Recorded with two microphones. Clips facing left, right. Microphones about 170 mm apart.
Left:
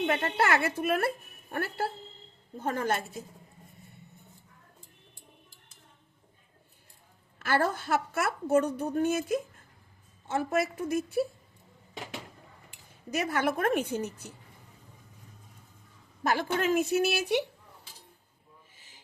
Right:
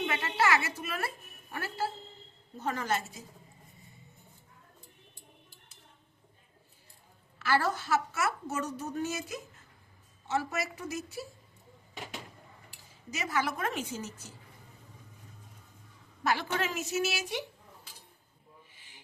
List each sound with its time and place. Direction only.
0.0 s a woman's voice: 50° left (ahead or behind)
7.3 s a woman's voice: 50° left (ahead or behind)
13.1 s a woman's voice: 55° left (ahead or behind)
16.2 s a woman's voice: 50° left (ahead or behind)